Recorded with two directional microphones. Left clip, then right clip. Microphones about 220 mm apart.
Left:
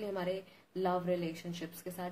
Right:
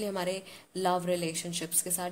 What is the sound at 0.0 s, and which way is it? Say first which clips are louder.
A woman's voice: right 4 dB; 45° right (ahead or behind).